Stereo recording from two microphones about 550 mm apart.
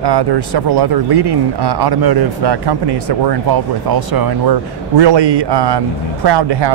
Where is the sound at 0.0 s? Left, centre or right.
Right.